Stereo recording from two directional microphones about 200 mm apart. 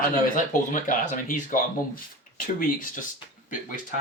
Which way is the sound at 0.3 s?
40° left (ahead or behind).